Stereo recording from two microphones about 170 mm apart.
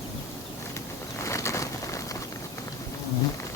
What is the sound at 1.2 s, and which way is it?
Bird, 15° left (ahead or behind).